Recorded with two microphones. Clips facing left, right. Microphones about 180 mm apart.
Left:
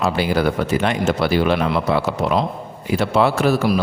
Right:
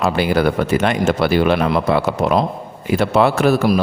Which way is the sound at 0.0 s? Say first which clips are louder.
Right 2 dB; 55° right (ahead or behind).